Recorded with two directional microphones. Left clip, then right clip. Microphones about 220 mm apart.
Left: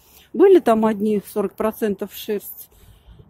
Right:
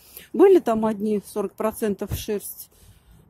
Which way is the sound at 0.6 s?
5° left (ahead or behind).